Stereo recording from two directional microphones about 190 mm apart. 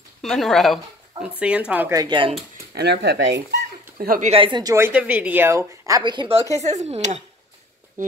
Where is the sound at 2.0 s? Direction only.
25° right (ahead or behind).